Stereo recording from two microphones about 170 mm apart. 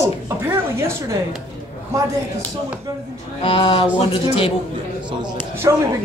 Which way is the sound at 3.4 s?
35° left (ahead or behind).